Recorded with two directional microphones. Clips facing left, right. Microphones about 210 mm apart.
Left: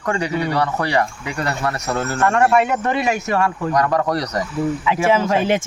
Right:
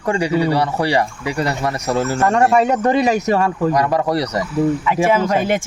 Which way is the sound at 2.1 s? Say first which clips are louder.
Even; 35° right (ahead or behind).